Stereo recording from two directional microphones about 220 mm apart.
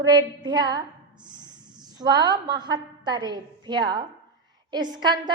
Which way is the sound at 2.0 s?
20° right (ahead or behind).